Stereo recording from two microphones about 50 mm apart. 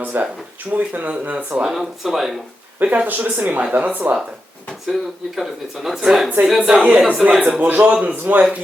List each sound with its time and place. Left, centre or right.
0.0 s speech: right
1.6 s speech: centre
2.7 s speech: right
5.4 s speech: centre
6.6 s a woman's voice: right
7.6 s speech: right